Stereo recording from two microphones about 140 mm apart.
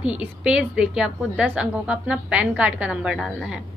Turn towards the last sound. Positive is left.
turn(degrees=-5)  # may be behind; listen again after turning